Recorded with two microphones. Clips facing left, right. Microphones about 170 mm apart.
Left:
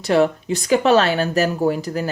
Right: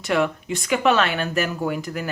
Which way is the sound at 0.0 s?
35° left (ahead or behind).